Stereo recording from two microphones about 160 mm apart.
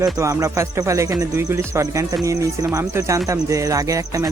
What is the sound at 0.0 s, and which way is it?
Speech, 20° right (ahead or behind).